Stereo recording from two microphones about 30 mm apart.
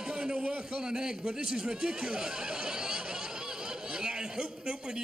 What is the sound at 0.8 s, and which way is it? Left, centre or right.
A man's voice, right.